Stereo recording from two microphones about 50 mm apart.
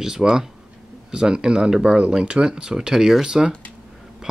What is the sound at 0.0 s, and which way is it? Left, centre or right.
Speech, centre.